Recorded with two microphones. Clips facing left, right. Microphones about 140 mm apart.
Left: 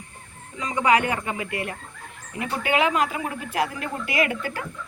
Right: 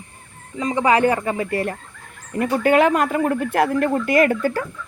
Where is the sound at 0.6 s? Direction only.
30° right (ahead or behind).